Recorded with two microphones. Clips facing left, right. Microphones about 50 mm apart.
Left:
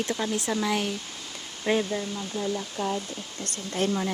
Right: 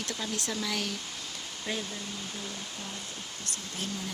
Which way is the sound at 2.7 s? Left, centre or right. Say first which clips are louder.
Left 11 dB; left.